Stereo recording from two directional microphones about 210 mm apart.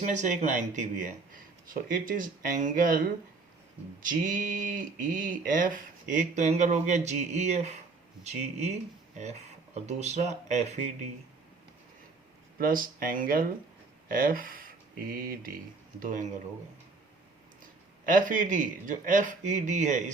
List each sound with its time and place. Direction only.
0.0 s speech: 35° right (ahead or behind)
4.0 s speech: 40° right (ahead or behind)
9.7 s speech: 30° right (ahead or behind)
12.5 s speech: 40° right (ahead or behind)
18.0 s speech: 40° right (ahead or behind)